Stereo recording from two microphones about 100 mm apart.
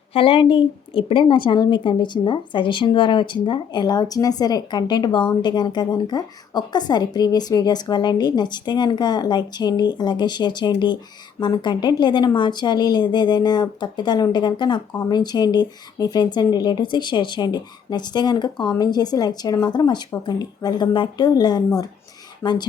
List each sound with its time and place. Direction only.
0.1 s a woman's voice: 65° left (ahead or behind); by 22.6 s 45° left (ahead or behind)